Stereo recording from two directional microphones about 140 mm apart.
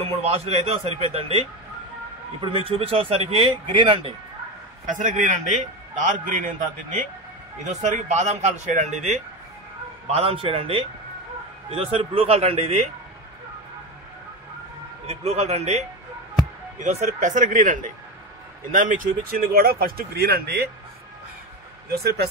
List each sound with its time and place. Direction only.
0.0 s a man's voice: 45° right (ahead or behind)
4.8 s a man's voice: 65° right (ahead or behind)
10.0 s a man's voice: 45° right (ahead or behind)
15.0 s a man's voice: 50° right (ahead or behind); by 20.6 s 90° right